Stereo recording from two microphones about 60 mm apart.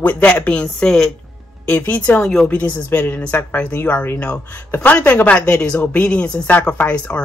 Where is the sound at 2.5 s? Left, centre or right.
Left.